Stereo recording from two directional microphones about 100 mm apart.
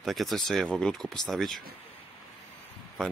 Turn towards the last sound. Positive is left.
turn(degrees=5)  # may be behind; listen again after turning